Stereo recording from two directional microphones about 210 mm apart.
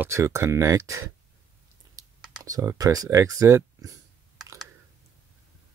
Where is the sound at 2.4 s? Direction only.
15° right (ahead or behind).